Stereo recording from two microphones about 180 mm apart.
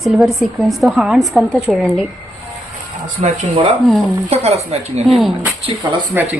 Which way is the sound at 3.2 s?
35° right (ahead or behind).